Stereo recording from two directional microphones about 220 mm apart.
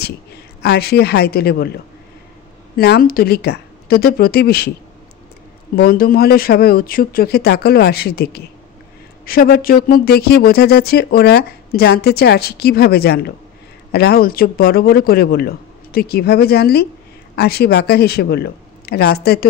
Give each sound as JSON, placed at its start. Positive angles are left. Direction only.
{"t": 0.6, "sound": "speech", "side_deg": 45}
{"t": 2.7, "sound": "speech", "side_deg": 45}
{"t": 5.8, "sound": "speech", "side_deg": 45}